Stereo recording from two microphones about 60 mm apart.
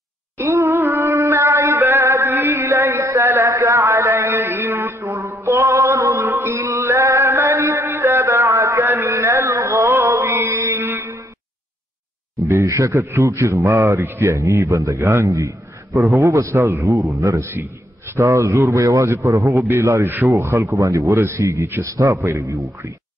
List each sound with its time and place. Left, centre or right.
0.4 s music: right
6.8 s a sound: right
12.4 s a sound: right
13.0 s a man's voice: right
15.9 s a man's voice: centre
16.2 s a man's voice: right